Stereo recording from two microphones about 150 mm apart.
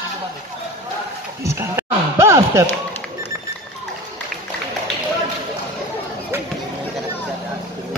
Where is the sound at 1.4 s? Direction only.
20° right (ahead or behind).